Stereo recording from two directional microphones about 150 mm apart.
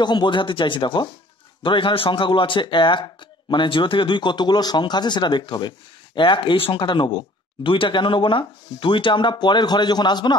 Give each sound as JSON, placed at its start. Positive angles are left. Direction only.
{"t": 0.0, "sound": "a man's voice", "side_deg": 30}